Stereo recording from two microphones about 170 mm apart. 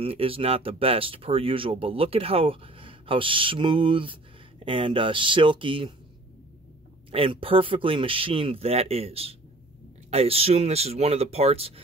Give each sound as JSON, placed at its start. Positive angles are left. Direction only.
{"t": 0.0, "sound": "speech", "side_deg": -35}
{"t": 7.1, "sound": "speech", "side_deg": -30}